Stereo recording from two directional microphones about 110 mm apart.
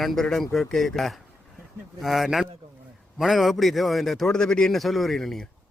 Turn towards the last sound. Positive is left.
turn(degrees=5)  # may be behind; listen again after turning